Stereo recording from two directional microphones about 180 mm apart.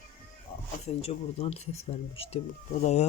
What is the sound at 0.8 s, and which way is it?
Speech, 35° left (ahead or behind).